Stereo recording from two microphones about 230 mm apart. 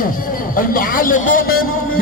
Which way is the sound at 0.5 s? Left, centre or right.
Left.